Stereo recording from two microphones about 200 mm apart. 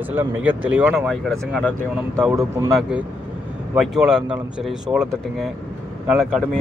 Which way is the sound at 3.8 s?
Centre (ahead or behind).